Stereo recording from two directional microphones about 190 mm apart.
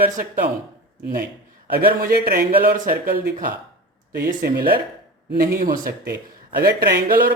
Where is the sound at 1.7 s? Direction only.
50° right (ahead or behind).